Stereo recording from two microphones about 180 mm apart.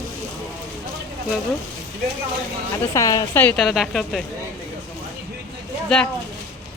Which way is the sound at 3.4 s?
Centre (ahead or behind).